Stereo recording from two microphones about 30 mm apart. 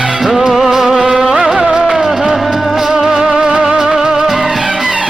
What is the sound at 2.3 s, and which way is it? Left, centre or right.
Music, centre.